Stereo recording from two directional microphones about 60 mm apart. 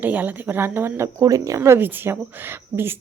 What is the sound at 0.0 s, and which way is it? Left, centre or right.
A woman's voice, right.